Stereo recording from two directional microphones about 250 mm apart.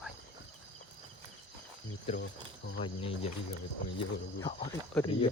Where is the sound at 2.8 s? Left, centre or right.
Left.